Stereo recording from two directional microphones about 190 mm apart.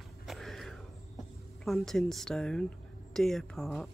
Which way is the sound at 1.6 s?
Centre (ahead or behind).